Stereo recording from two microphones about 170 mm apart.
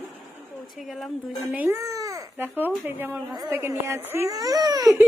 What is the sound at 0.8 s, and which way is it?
Speech, centre (ahead or behind).